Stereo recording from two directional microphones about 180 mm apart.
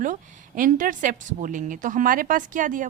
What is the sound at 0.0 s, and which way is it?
A woman's voice, 45° right (ahead or behind).